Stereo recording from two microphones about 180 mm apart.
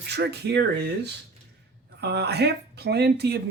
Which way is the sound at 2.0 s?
65° right (ahead or behind).